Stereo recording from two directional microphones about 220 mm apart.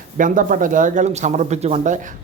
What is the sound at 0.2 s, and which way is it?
Speech, 35° right (ahead or behind).